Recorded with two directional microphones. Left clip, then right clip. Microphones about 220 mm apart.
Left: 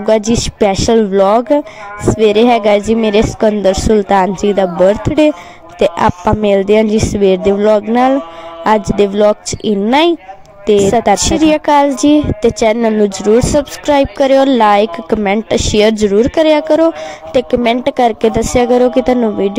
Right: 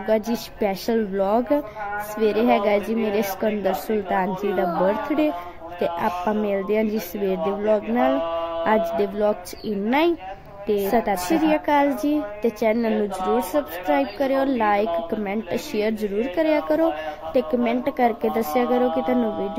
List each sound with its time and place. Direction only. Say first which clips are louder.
0.0 s a woman's voice: left 11 dB; 35° left (ahead or behind)